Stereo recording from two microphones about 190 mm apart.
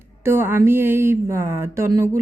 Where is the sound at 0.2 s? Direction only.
10° right (ahead or behind).